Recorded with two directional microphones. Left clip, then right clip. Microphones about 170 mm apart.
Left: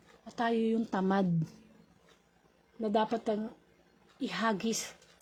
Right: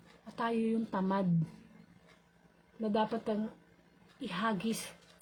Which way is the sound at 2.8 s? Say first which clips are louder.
Left 3 dB; 30° left (ahead or behind).